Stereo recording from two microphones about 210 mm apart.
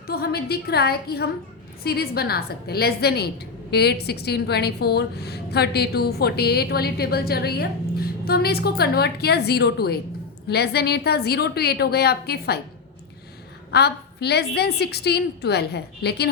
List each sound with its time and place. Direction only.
0.1 s a woman's voice: 50° left (ahead or behind)
13.7 s a woman's voice: 50° left (ahead or behind)